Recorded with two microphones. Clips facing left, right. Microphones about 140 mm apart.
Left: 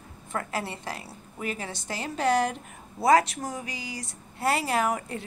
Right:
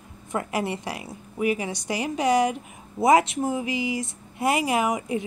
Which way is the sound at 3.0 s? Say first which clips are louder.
Right 3 dB; 20° right (ahead or behind).